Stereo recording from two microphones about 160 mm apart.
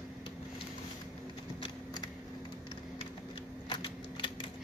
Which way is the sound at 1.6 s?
25° left (ahead or behind).